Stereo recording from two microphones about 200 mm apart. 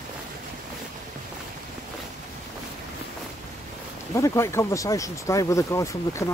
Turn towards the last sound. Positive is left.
turn(degrees=15)  # may be behind; listen again after turning